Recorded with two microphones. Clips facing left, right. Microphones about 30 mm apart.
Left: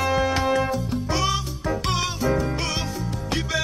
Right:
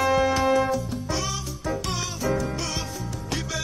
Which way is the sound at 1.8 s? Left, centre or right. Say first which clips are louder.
Left 6 dB; left.